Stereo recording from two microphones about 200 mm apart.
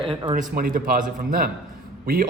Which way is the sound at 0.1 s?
25° right (ahead or behind).